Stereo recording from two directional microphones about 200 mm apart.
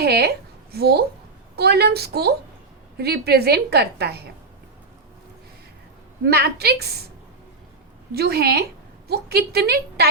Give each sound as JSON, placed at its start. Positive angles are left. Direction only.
{"t": 0.0, "sound": "a woman's voice", "side_deg": -55}
{"t": 6.2, "sound": "a woman's voice", "side_deg": -55}
{"t": 8.1, "sound": "a woman's voice", "side_deg": -50}